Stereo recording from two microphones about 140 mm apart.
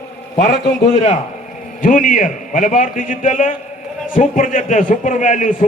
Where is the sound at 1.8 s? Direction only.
70° left (ahead or behind).